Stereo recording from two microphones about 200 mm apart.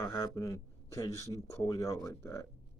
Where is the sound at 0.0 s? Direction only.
15° left (ahead or behind).